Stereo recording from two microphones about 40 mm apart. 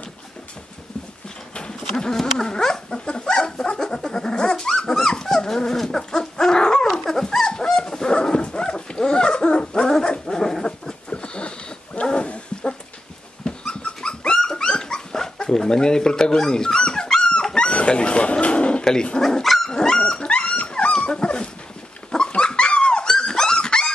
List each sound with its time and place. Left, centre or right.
1.5 s a sound: left
2.3 s dog: centre
11.2 s dog: left
19.1 s speech: centre
19.4 s dog: centre
19.7 s dog: centre
20.0 s dog: left